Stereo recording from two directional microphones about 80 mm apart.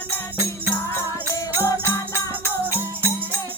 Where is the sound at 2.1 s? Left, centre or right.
Right.